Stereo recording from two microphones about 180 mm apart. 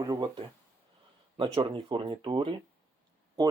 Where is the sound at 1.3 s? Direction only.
25° right (ahead or behind).